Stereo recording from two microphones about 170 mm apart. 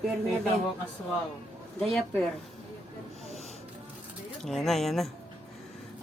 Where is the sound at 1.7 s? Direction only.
Centre (ahead or behind).